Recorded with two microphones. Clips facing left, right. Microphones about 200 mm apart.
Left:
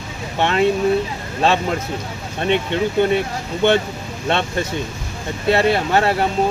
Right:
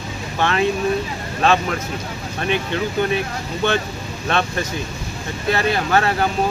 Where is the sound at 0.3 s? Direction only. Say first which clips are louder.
Left 3 dB; 25° left (ahead or behind).